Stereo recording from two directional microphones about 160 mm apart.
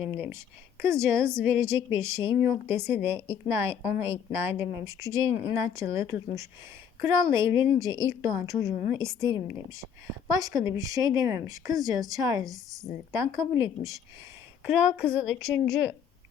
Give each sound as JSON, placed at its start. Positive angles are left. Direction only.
{"t": 0.8, "sound": "a woman's voice", "side_deg": -15}
{"t": 15.0, "sound": "a woman's voice", "side_deg": 5}